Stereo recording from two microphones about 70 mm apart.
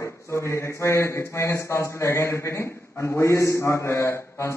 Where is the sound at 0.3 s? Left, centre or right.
Left.